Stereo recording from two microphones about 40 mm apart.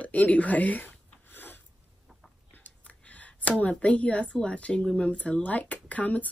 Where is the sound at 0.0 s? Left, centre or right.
Left.